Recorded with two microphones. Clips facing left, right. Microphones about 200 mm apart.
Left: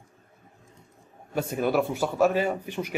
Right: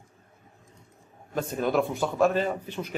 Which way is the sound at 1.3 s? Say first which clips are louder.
Left 1 dB; 10° left (ahead or behind).